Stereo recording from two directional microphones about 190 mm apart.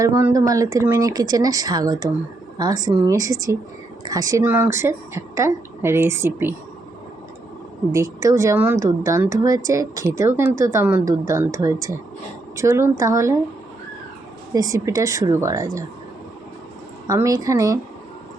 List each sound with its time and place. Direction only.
0.0 s speech: 15° right (ahead or behind)
7.9 s speech: 15° right (ahead or behind)
14.5 s speech: 15° right (ahead or behind)
17.1 s speech: 20° right (ahead or behind)